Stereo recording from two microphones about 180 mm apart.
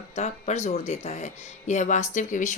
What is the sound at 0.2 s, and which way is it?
A woman's voice, 40° left (ahead or behind).